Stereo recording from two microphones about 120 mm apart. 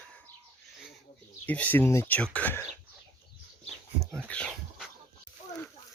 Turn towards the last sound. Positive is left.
turn(degrees=5)  # may be behind; listen again after turning